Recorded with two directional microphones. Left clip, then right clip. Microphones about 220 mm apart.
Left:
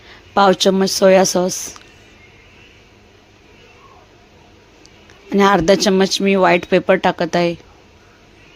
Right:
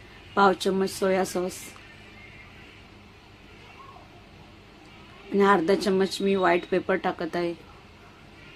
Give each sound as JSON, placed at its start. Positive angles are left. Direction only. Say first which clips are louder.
{"t": 0.3, "sound": "speech", "louder": "left 9 dB", "side_deg": 40}
{"t": 5.3, "sound": "speech", "louder": "left 8 dB", "side_deg": 40}